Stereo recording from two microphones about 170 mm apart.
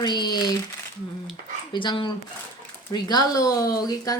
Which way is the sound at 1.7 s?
30° left (ahead or behind).